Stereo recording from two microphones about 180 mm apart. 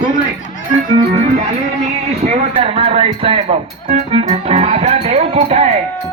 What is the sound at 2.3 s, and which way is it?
Speech, 35° right (ahead or behind).